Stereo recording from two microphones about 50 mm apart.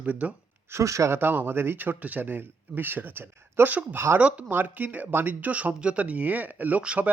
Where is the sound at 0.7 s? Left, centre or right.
Right.